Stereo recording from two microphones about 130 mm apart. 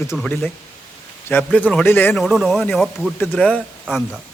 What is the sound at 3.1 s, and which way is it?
Speech, 15° left (ahead or behind).